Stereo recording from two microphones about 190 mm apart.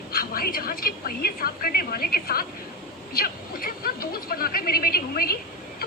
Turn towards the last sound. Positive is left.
turn(degrees=50)  # may be behind; listen again after turning